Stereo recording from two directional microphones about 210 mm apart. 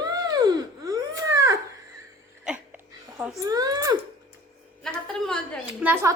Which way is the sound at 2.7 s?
5° right (ahead or behind).